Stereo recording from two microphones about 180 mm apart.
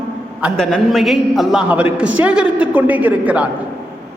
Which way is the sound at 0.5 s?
Centre (ahead or behind).